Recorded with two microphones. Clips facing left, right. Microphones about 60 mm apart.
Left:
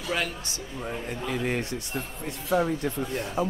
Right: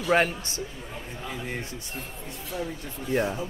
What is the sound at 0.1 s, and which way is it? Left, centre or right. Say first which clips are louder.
Speech: right 7 dB; right.